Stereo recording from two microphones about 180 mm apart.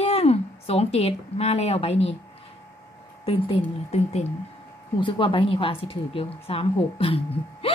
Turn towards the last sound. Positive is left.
turn(degrees=30)  # may be behind; listen again after turning